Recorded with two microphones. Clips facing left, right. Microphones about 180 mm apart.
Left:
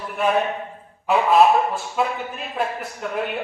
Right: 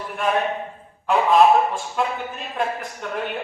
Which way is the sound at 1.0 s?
5° left (ahead or behind).